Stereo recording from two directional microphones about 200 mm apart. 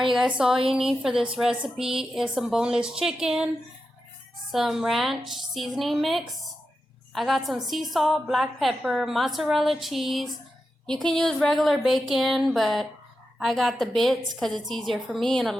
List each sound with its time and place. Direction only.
0.1 s a woman's voice: 5° right (ahead or behind)
4.5 s a woman's voice: centre (ahead or behind)